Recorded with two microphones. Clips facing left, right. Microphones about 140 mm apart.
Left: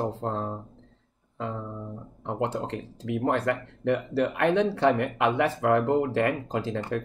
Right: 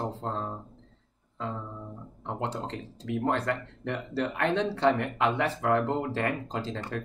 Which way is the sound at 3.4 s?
55° left (ahead or behind).